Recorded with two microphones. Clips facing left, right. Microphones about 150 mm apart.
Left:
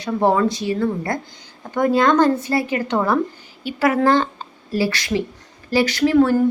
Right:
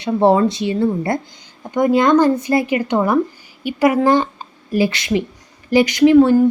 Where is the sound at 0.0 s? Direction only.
25° right (ahead or behind).